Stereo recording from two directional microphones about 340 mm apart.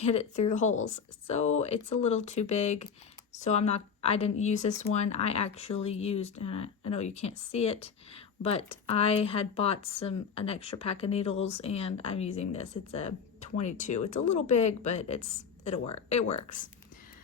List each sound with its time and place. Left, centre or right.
0.1 s speech: centre